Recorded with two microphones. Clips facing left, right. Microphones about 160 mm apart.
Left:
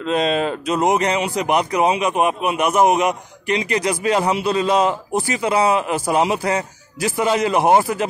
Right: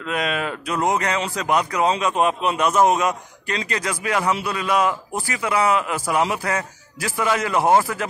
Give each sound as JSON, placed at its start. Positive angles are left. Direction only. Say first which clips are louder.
{"t": 0.0, "sound": "speech", "louder": "left 6 dB", "side_deg": 30}